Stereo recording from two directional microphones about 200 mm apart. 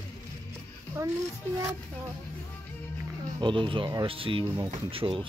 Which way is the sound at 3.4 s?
25° right (ahead or behind).